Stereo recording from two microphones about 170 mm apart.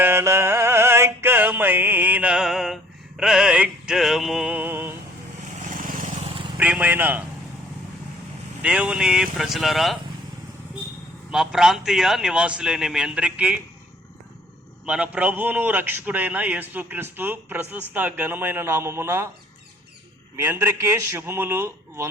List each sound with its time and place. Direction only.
0.0 s music: 15° right (ahead or behind)
5.5 s vehicle: 50° right (ahead or behind)
6.3 s vehicle: 30° right (ahead or behind)
6.6 s a man's voice: 10° right (ahead or behind)
8.6 s speech: 5° right (ahead or behind)
11.3 s speech: 5° right (ahead or behind)
14.8 s a man's voice: 5° right (ahead or behind)
20.3 s a man's voice: 15° right (ahead or behind)